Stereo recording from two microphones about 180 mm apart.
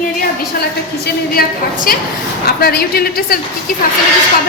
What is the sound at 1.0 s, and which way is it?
A woman's voice, 55° left (ahead or behind).